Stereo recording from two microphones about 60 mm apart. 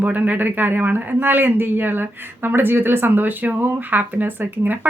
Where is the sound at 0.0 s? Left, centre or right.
Right.